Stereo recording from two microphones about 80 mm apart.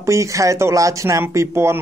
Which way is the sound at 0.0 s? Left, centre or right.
Right.